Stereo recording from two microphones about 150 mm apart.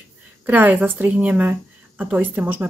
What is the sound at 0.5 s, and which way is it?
A woman's voice, 10° right (ahead or behind).